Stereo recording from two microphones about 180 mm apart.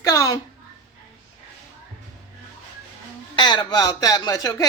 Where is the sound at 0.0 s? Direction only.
20° left (ahead or behind).